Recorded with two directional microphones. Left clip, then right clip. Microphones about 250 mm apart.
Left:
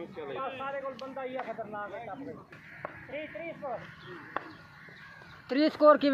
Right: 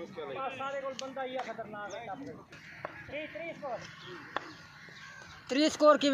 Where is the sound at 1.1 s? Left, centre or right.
Centre.